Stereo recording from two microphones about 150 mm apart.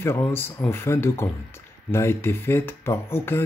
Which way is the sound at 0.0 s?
15° left (ahead or behind).